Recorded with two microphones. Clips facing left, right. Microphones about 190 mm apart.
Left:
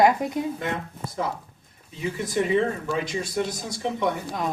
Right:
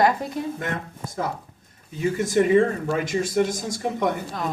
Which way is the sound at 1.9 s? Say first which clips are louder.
Right 5 dB; 45° right (ahead or behind).